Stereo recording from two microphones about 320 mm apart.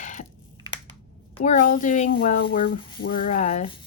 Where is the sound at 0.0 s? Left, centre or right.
Left.